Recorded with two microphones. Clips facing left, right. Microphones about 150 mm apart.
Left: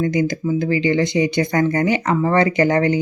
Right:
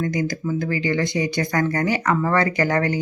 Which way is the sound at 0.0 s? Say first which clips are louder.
Left 4 dB; 25° left (ahead or behind).